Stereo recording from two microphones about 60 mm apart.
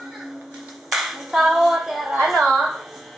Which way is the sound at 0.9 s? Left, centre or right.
Centre.